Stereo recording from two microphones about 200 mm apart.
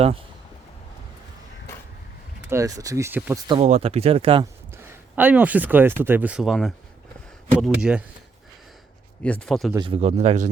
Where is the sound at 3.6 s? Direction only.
35° right (ahead or behind).